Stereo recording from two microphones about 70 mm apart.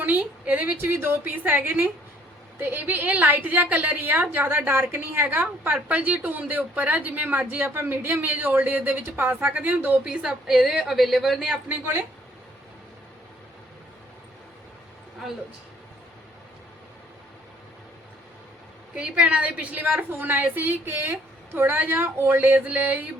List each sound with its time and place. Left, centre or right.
0.0 s a woman's voice: right
9.5 s a woman's voice: centre
18.9 s a woman's voice: centre